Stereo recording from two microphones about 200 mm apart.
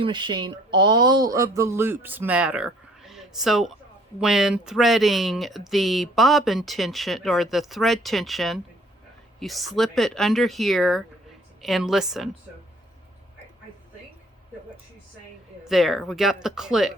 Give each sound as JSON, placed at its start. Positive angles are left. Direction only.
{"t": 0.0, "sound": "speech", "side_deg": -25}
{"t": 15.6, "sound": "speech", "side_deg": 0}